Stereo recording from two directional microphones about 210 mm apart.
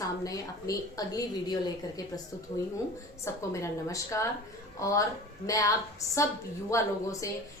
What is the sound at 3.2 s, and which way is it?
A woman's voice, 15° left (ahead or behind).